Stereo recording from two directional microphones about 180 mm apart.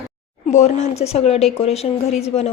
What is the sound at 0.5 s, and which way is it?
Speech, 35° left (ahead or behind).